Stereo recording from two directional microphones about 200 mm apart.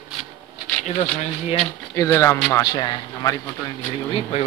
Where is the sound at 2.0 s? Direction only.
15° left (ahead or behind).